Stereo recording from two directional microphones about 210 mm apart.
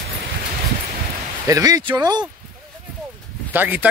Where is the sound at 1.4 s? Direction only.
15° right (ahead or behind).